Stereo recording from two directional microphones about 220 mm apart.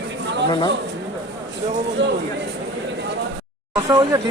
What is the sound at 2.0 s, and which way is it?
Speech, 55° right (ahead or behind).